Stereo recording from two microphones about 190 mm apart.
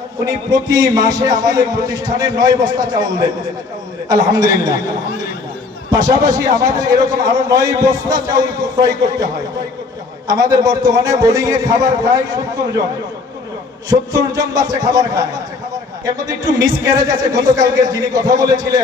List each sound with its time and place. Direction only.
0.2 s a man's voice: 20° right (ahead or behind)
5.9 s a man's voice: 20° right (ahead or behind)
13.8 s a man's voice: 20° right (ahead or behind)
16.3 s a man's voice: 20° right (ahead or behind)